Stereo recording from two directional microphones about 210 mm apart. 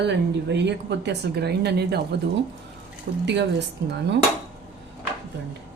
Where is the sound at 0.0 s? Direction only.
55° right (ahead or behind).